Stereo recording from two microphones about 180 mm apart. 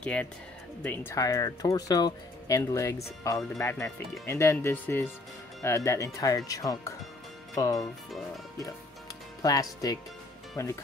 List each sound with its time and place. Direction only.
0.0 s speech: 5° left (ahead or behind)
9.4 s speech: 20° left (ahead or behind)